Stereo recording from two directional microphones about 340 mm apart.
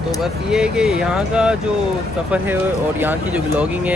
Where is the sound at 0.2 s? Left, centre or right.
Centre.